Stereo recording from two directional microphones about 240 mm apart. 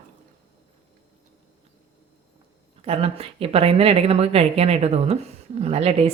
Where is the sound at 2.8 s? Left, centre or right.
Right.